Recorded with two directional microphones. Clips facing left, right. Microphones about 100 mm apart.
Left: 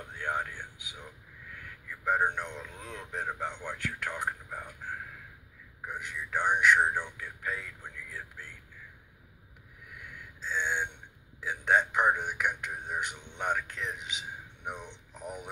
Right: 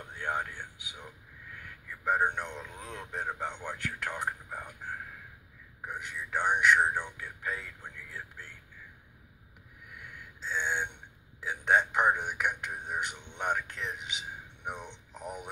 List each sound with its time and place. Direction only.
0.2 s speech: 20° right (ahead or behind)
2.0 s speech: 20° right (ahead or behind)
5.9 s speech: 20° right (ahead or behind)
10.4 s a sound: 20° right (ahead or behind)
11.4 s speech: 20° right (ahead or behind)